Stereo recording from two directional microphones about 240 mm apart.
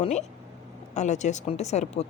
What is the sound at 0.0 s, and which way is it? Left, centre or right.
Speech, left.